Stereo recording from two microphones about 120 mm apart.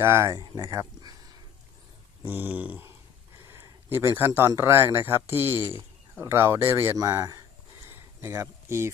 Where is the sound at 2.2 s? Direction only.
15° right (ahead or behind).